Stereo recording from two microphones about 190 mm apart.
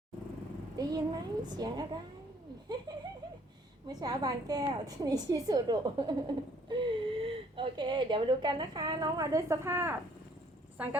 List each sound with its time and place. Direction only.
0.8 s a woman's voice: 20° right (ahead or behind)